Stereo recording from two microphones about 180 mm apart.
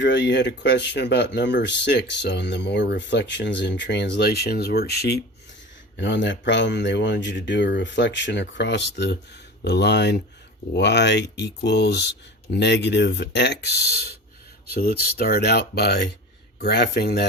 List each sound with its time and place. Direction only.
0.0 s speech: 75° left (ahead or behind)
6.0 s speech: 80° left
14.7 s speech: 60° left (ahead or behind)